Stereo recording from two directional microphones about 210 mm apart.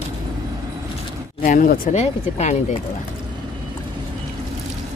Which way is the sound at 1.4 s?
40° left (ahead or behind).